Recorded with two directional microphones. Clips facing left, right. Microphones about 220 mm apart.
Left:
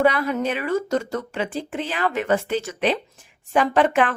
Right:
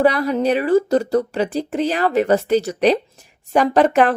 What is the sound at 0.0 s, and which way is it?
A woman's voice, 35° right (ahead or behind).